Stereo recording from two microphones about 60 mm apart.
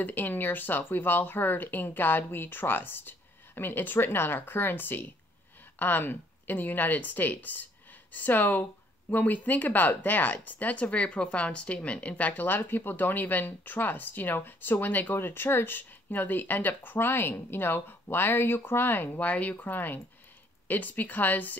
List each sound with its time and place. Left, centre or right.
0.0 s speech: left
19.1 s speech: left